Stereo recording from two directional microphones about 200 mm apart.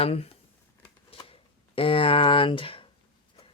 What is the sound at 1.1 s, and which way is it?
Shuffling cards, 30° left (ahead or behind).